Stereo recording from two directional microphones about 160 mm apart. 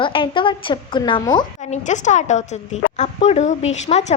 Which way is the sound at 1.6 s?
45° left (ahead or behind).